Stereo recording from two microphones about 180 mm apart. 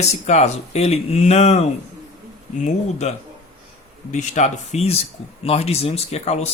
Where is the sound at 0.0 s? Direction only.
40° left (ahead or behind).